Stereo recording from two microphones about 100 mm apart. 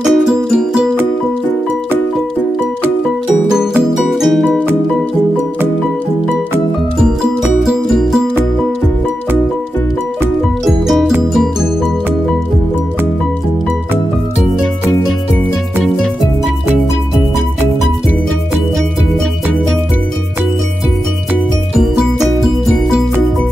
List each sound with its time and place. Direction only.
0.0 s music: 5° right (ahead or behind)
3.4 s music: 5° right (ahead or behind)
4.5 s music: 15° right (ahead or behind)
7.6 s music: 5° right (ahead or behind)
21.7 s music: 5° right (ahead or behind)